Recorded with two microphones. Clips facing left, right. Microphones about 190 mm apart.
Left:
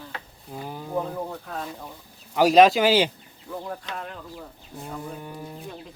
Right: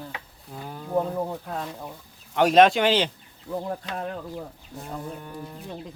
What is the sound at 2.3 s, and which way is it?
Speech, centre (ahead or behind).